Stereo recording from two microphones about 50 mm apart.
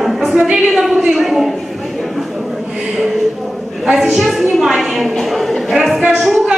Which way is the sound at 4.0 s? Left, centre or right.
Centre.